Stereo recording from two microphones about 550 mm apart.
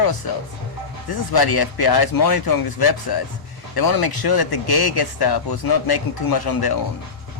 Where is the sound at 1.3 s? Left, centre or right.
Left.